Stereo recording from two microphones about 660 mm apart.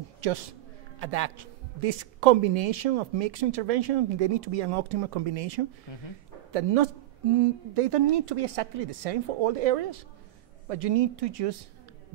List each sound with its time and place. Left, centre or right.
0.2 s a man's voice: right
5.9 s speech: left
6.5 s a man's voice: right